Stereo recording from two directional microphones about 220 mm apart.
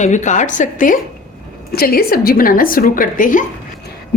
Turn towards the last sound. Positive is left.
turn(degrees=35)  # may be behind; listen again after turning